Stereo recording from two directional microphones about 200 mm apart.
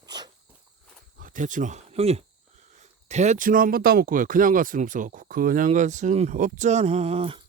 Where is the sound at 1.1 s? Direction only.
40° right (ahead or behind).